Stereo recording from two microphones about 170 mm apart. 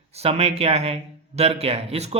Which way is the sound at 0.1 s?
35° right (ahead or behind).